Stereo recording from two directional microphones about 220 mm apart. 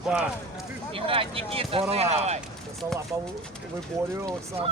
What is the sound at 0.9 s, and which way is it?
Speech, 25° right (ahead or behind).